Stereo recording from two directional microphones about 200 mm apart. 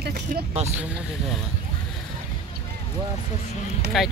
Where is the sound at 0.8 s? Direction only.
5° right (ahead or behind).